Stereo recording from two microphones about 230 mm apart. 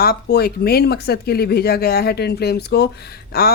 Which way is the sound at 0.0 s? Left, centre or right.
Left.